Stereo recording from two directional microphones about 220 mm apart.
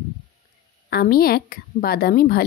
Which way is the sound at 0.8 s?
45° left (ahead or behind).